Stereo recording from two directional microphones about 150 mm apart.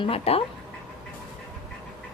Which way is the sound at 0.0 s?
40° left (ahead or behind).